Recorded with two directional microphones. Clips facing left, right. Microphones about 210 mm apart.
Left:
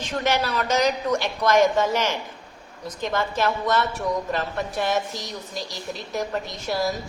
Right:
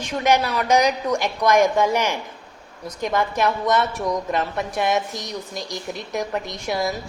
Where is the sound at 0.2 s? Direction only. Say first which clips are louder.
Right 4 dB; 10° right (ahead or behind).